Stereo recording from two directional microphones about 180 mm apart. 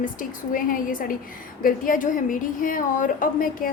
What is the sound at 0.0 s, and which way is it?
A woman's voice, 50° left (ahead or behind).